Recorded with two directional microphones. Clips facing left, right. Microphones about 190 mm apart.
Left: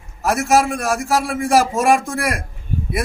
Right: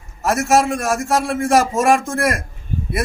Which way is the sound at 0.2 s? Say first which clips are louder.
Even; centre (ahead or behind).